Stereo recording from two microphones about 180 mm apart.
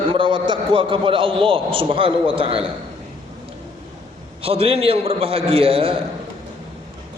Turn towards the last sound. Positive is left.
turn(degrees=-30)  # may be behind; listen again after turning